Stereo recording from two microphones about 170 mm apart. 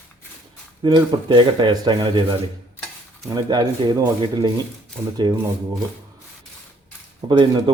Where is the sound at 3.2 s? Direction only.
25° right (ahead or behind).